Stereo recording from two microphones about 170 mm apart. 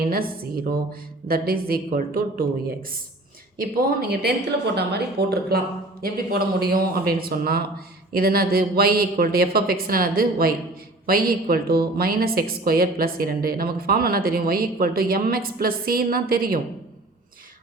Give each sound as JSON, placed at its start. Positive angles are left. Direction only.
{"t": 0.1, "sound": "a woman's voice", "side_deg": -60}
{"t": 3.6, "sound": "a woman's voice", "side_deg": -55}
{"t": 6.0, "sound": "a woman's voice", "side_deg": -60}